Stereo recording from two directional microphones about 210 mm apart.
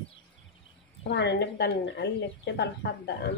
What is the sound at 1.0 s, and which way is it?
A woman's voice, 55° left (ahead or behind).